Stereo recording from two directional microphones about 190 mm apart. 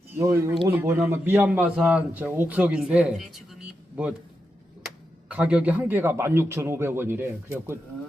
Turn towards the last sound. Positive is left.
turn(degrees=-10)  # may be behind; listen again after turning